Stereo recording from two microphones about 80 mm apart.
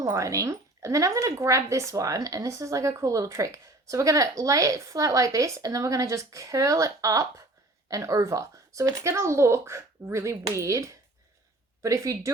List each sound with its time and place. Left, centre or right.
0.0 s speech: right